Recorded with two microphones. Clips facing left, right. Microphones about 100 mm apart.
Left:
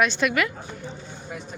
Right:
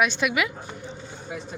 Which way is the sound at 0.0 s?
5° right (ahead or behind).